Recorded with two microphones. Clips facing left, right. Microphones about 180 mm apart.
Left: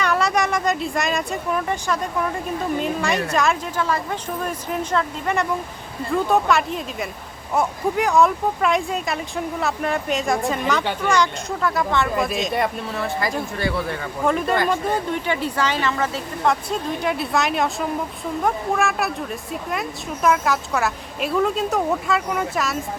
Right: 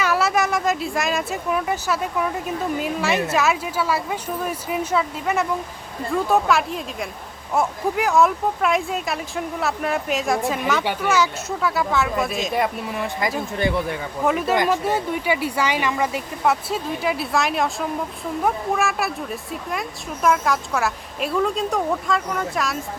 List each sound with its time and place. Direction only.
0.0 s speech: 5° right (ahead or behind)
12.9 s speech: 15° right (ahead or behind); by 22.8 s centre (ahead or behind)